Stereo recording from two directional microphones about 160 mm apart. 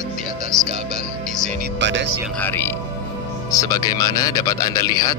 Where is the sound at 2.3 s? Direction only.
10° left (ahead or behind).